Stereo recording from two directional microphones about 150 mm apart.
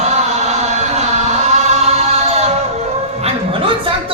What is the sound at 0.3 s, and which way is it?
Chant, 50° right (ahead or behind).